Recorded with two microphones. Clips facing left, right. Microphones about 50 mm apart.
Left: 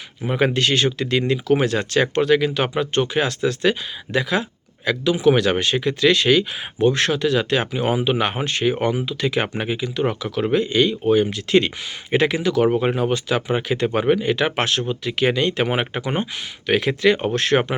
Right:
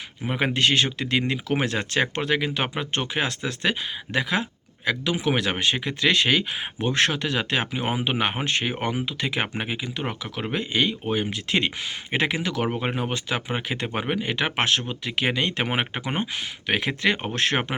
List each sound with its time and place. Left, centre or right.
0.3 s speech: centre
12.4 s speech: right
12.6 s speech: centre